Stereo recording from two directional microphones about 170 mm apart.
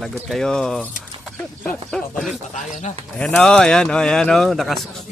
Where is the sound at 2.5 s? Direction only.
45° left (ahead or behind).